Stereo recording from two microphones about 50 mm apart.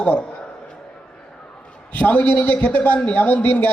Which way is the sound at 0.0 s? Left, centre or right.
Left.